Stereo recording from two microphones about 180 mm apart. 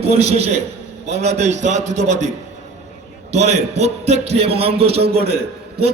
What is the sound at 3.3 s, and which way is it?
A man's voice, 35° right (ahead or behind).